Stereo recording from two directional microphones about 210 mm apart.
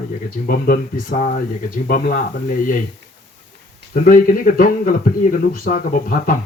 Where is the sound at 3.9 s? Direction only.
40° left (ahead or behind).